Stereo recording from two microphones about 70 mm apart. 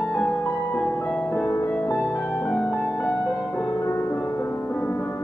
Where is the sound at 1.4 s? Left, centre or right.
Left.